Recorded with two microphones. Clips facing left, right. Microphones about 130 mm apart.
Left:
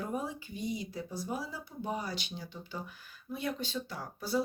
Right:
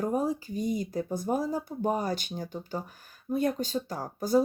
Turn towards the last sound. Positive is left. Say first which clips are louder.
# right 8 dB
turn(degrees=-45)  # may be behind; listen again after turning